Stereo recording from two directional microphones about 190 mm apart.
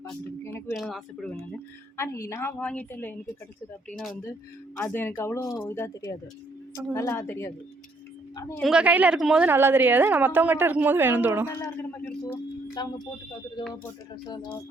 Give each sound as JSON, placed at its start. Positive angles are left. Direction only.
{"t": 0.1, "sound": "a sound", "side_deg": 10}
{"t": 0.7, "sound": "speech", "side_deg": 0}
{"t": 2.0, "sound": "speech", "side_deg": 15}
{"t": 4.8, "sound": "speech", "side_deg": 10}
{"t": 8.5, "sound": "a woman's voice", "side_deg": 0}
{"t": 11.4, "sound": "speech", "side_deg": 15}
{"t": 14.3, "sound": "speech", "side_deg": 25}